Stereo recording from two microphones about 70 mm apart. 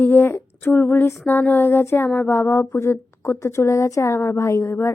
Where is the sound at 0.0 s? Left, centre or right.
Left.